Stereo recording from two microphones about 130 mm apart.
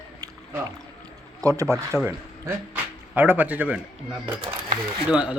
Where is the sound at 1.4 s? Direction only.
25° right (ahead or behind).